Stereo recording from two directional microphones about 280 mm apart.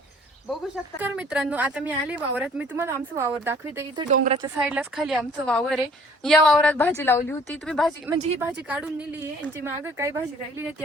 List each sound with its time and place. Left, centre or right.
0.9 s a woman's voice: centre
4.1 s a woman's voice: right
4.4 s a woman's voice: centre
8.1 s a woman's voice: centre